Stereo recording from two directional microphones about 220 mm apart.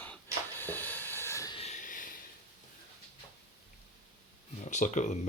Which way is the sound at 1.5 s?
30° left (ahead or behind).